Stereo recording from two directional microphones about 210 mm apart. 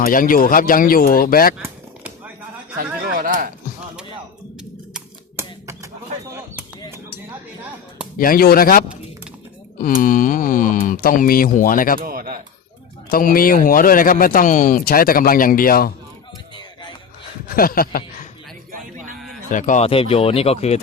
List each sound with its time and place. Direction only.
0.0 s speech: 40° left (ahead or behind)
1.5 s a sound: 5° right (ahead or behind)
2.7 s a sound: 40° right (ahead or behind)
4.9 s a sound: 15° right (ahead or behind)
8.2 s speech: 45° left (ahead or behind)
9.8 s speech: 40° left (ahead or behind)
11.9 s speech: 45° right (ahead or behind)
13.1 s speech: 45° left (ahead or behind)
17.5 s a man's voice: 45° left (ahead or behind)
18.7 s music: 40° right (ahead or behind)
19.5 s speech: 40° left (ahead or behind)